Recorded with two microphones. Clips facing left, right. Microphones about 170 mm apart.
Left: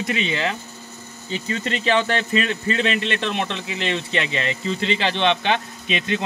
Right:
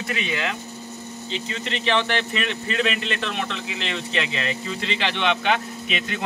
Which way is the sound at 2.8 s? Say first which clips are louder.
Even; 30° left (ahead or behind).